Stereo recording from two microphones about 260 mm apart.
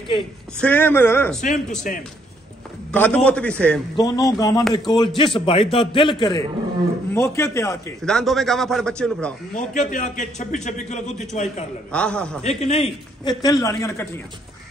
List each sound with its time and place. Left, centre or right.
0.6 s a man's voice: centre
1.9 s a man's voice: left
2.9 s a man's voice: centre
9.5 s a man's voice: left
11.9 s a man's voice: centre
12.4 s a man's voice: left